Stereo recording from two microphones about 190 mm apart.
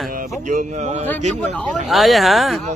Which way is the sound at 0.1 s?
45° right (ahead or behind).